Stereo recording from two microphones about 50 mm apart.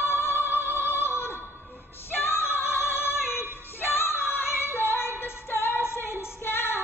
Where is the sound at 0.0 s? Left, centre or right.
Left.